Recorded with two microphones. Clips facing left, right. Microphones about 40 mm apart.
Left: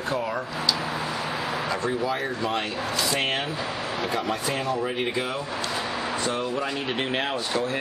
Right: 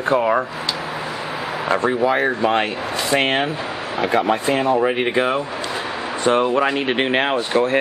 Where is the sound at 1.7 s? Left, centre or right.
Right.